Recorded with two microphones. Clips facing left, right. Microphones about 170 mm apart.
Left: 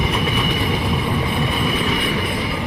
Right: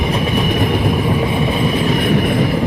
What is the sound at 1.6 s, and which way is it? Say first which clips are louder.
Train: right 5 dB; 40° right (ahead or behind).